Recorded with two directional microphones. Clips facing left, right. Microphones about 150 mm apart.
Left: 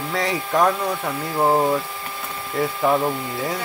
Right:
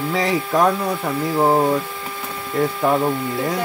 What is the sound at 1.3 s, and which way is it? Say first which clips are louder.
Speech: right 1 dB; 10° right (ahead or behind).